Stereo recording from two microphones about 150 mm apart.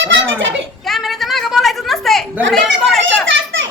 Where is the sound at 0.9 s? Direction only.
Centre (ahead or behind).